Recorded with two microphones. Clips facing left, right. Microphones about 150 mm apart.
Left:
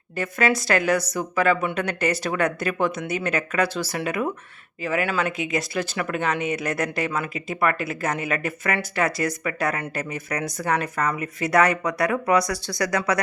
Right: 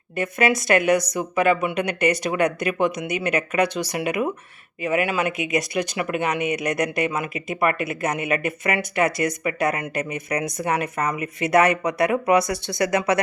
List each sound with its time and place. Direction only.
0.2 s speech: 20° right (ahead or behind)